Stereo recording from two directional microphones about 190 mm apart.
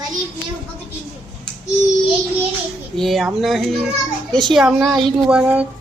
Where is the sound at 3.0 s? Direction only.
Centre (ahead or behind).